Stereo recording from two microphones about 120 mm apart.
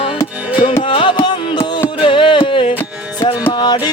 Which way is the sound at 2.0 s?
45° left (ahead or behind).